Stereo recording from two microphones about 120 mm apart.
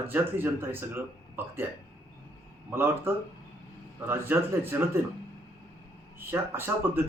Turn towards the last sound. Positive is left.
turn(degrees=-20)  # may be behind; listen again after turning